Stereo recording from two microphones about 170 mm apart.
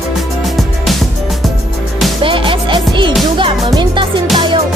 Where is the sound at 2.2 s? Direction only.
30° right (ahead or behind).